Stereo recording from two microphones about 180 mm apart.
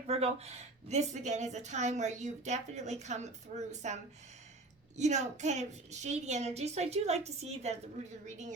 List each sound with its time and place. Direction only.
0.1 s a woman's voice: 35° right (ahead or behind)